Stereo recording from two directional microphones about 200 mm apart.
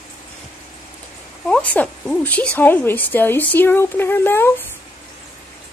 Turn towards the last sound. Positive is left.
turn(degrees=10)  # may be behind; listen again after turning